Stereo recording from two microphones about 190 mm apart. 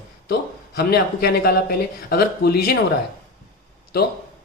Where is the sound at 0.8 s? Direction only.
55° left (ahead or behind).